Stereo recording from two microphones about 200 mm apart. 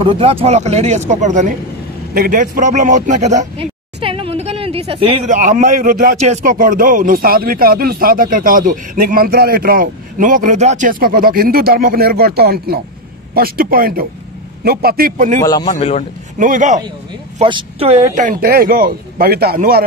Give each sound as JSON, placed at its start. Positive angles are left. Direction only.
{"t": 0.0, "sound": "speech", "side_deg": -30}
{"t": 5.3, "sound": "a man's voice", "side_deg": -40}
{"t": 15.4, "sound": "a man's voice", "side_deg": 20}
{"t": 15.7, "sound": "a man's voice", "side_deg": 30}
{"t": 16.3, "sound": "speech", "side_deg": -40}
{"t": 17.4, "sound": "a man's voice", "side_deg": -25}